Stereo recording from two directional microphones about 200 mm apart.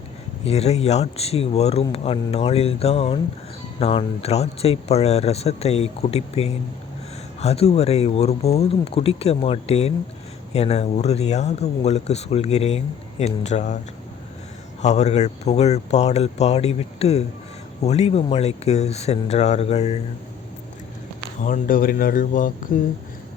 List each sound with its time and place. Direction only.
0.4 s speech: 30° left (ahead or behind)
14.8 s speech: 35° left (ahead or behind)
21.4 s speech: 45° left (ahead or behind)